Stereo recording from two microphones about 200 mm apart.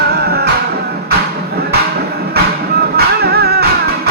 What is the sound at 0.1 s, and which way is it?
Music, 55° right (ahead or behind).